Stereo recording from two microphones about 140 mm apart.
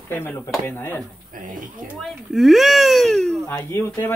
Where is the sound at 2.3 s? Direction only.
Centre (ahead or behind).